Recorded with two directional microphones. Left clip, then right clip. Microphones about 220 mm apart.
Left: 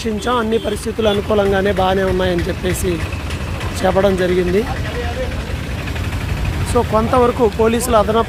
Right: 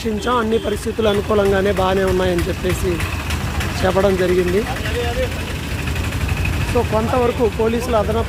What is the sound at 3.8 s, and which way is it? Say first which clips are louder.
Speech: left 2 dB; 5° left (ahead or behind).